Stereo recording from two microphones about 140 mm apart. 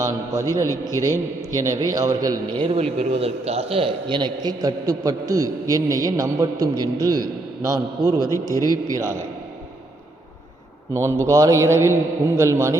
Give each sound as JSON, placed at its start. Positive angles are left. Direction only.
{"t": 0.0, "sound": "a man's voice", "side_deg": -25}
{"t": 0.7, "sound": "a man's voice", "side_deg": 20}
{"t": 1.5, "sound": "a man's voice", "side_deg": -25}
{"t": 2.6, "sound": "a man's voice", "side_deg": -45}
{"t": 8.3, "sound": "a man's voice", "side_deg": 25}
{"t": 8.9, "sound": "a man's voice", "side_deg": -20}
{"t": 10.9, "sound": "a man's voice", "side_deg": -20}